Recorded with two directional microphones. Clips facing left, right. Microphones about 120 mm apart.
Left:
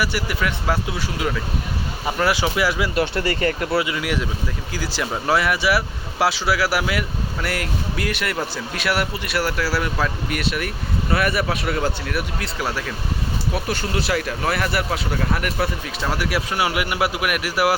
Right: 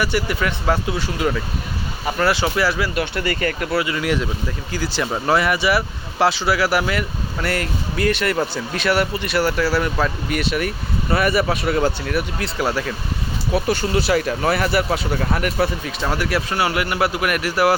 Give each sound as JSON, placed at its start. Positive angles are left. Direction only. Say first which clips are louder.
{"t": 0.0, "sound": "speech", "louder": "right 2 dB", "side_deg": 5}
{"t": 2.9, "sound": "speech", "louder": "left 1 dB", "side_deg": 30}
{"t": 3.9, "sound": "speech", "louder": "right 3 dB", "side_deg": 5}